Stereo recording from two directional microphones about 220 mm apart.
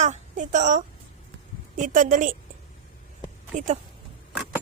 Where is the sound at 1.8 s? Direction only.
35° right (ahead or behind).